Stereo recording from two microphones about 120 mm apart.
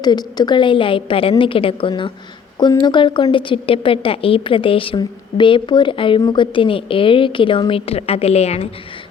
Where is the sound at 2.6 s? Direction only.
35° left (ahead or behind); by 8.6 s 60° left (ahead or behind).